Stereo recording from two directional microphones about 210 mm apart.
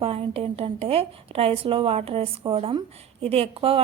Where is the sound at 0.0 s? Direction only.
30° right (ahead or behind).